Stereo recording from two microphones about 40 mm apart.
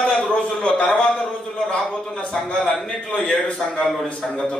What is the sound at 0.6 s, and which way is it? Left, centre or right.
A man's voice, left.